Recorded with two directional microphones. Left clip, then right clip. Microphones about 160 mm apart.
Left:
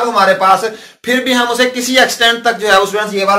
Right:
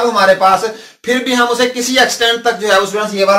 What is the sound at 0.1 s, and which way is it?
Speech, 20° left (ahead or behind).